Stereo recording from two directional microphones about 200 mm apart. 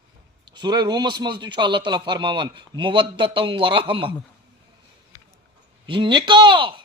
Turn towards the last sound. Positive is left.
turn(degrees=-25)  # may be behind; listen again after turning